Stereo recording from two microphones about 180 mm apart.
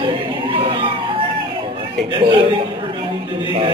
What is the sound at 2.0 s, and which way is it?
Speech, 25° right (ahead or behind).